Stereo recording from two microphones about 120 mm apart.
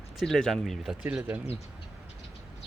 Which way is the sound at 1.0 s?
15° right (ahead or behind).